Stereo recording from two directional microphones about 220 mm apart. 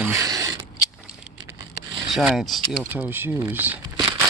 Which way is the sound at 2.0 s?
Centre (ahead or behind).